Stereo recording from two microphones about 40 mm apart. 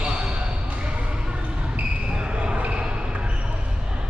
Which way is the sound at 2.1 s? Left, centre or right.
Right.